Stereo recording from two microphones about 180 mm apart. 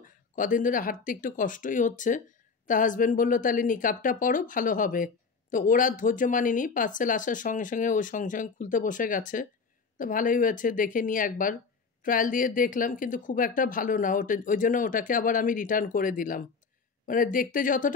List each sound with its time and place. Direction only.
0.0 s speech: 45° left (ahead or behind)